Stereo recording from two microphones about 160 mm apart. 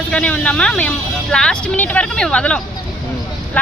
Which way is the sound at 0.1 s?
10° left (ahead or behind).